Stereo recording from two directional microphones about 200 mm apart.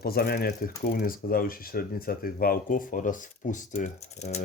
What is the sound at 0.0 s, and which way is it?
Speech, 50° left (ahead or behind).